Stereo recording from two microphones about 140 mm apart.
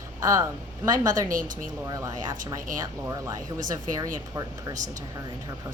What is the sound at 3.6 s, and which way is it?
Speech, 70° right (ahead or behind).